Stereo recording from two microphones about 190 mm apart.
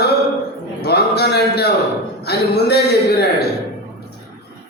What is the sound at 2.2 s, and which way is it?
Speech, 60° left (ahead or behind).